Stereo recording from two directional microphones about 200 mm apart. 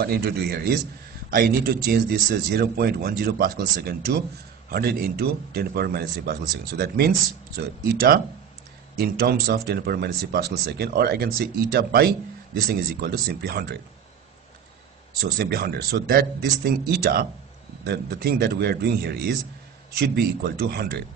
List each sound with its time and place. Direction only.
0.0 s speech: 50° right (ahead or behind)
7.6 s speech: 50° right (ahead or behind)
15.1 s speech: 50° right (ahead or behind)